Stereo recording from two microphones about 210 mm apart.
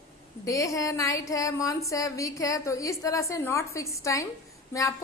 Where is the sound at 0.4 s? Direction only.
15° left (ahead or behind).